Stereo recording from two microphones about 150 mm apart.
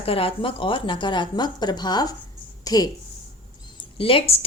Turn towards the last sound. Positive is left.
turn(degrees=40)  # may be behind; listen again after turning